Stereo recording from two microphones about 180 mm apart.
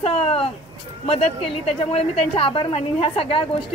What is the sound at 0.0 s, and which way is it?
A woman's voice, 35° left (ahead or behind).